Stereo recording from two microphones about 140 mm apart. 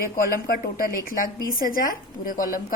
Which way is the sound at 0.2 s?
90° left.